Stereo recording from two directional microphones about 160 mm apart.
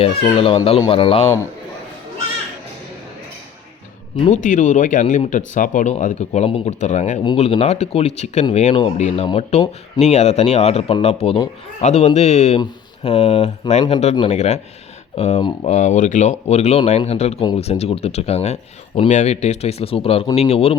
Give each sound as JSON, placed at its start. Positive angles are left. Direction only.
{"t": 0.3, "sound": "speech", "side_deg": 35}
{"t": 4.2, "sound": "speech", "side_deg": 50}
{"t": 15.6, "sound": "speech", "side_deg": 50}